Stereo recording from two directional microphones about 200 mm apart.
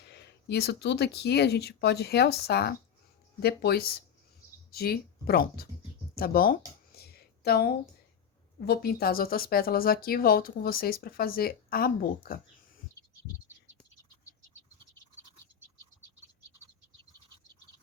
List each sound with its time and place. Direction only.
0.0 s speech: 55° left (ahead or behind)
6.1 s a sound: 45° left (ahead or behind)
8.6 s speech: 50° left (ahead or behind)